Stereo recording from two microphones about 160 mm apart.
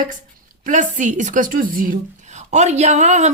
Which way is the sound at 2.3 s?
45° right (ahead or behind).